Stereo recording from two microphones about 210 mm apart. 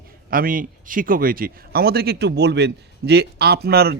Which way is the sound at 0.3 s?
40° right (ahead or behind).